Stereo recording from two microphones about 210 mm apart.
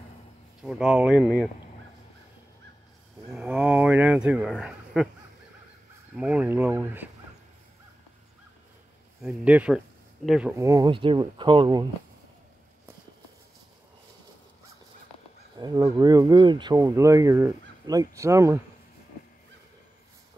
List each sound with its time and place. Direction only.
0.6 s speech: 5° right (ahead or behind)
3.3 s speech: 10° right (ahead or behind)
6.1 s speech: 5° right (ahead or behind)
9.2 s speech: 5° right (ahead or behind)
10.6 s speech: 15° right (ahead or behind)
15.6 s speech: 20° right (ahead or behind)